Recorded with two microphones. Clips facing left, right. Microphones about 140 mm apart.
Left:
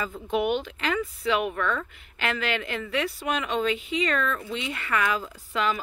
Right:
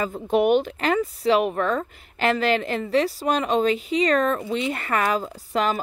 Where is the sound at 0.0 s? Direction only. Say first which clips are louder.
Right 6 dB; 45° right (ahead or behind).